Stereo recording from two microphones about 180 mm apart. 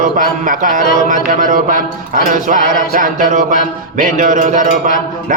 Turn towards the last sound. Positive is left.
turn(degrees=-45)  # may be behind; listen again after turning